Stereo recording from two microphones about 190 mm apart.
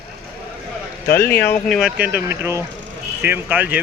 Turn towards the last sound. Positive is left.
turn(degrees=-10)  # may be behind; listen again after turning